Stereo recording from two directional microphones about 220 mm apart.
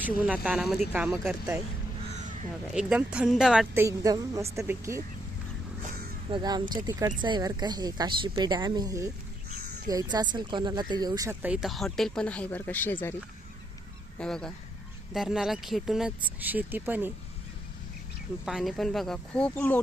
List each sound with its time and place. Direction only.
0.0 s speech: 5° right (ahead or behind)
2.7 s speech: 5° right (ahead or behind)
6.3 s speech: 20° right (ahead or behind); by 13.1 s 10° left (ahead or behind)
14.2 s speech: 5° left (ahead or behind)
18.4 s speech: centre (ahead or behind)